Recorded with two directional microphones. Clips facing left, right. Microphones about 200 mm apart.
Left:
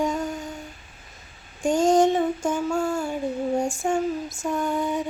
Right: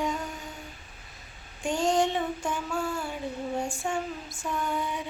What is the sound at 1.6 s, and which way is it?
Female singing, 45° left (ahead or behind).